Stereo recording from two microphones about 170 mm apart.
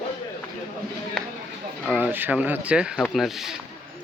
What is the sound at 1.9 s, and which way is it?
Speech, 10° right (ahead or behind).